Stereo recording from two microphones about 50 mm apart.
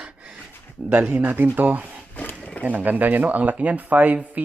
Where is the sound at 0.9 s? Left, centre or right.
Right.